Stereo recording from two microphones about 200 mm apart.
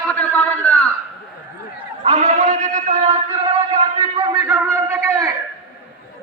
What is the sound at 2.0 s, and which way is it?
Sheep, 35° right (ahead or behind).